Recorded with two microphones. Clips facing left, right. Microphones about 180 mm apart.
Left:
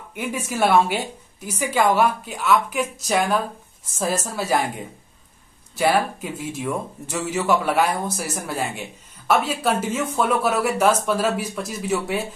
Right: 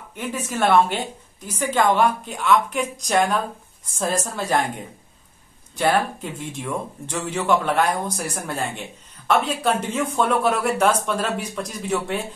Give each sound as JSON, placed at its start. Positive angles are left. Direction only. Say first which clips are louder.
{"t": 0.1, "sound": "a woman's voice", "louder": "left 1 dB", "side_deg": 10}
{"t": 5.8, "sound": "a woman's voice", "louder": "left 1 dB", "side_deg": 5}